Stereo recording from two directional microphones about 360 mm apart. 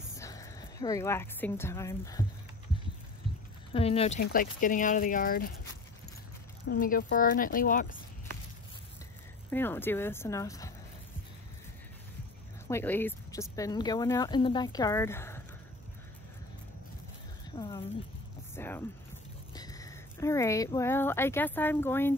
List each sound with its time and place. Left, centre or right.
0.2 s speech: centre
3.3 s a sound: centre
3.7 s speech: centre
6.6 s speech: left
9.5 s speech: centre
12.6 s speech: centre
17.6 s speech: centre